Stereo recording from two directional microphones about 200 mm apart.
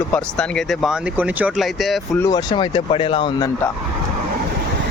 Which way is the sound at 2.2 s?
20° left (ahead or behind).